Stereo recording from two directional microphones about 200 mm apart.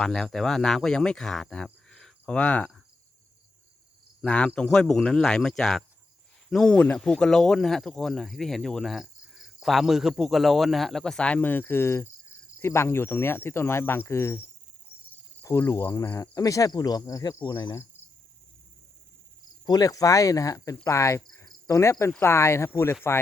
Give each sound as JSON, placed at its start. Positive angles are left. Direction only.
{"t": 0.0, "sound": "speech", "side_deg": 0}
{"t": 4.2, "sound": "speech", "side_deg": 5}
{"t": 12.5, "sound": "cricket", "side_deg": 15}
{"t": 19.6, "sound": "cricket", "side_deg": 20}